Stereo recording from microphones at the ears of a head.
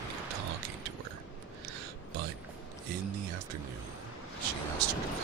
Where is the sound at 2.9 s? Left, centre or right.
Right.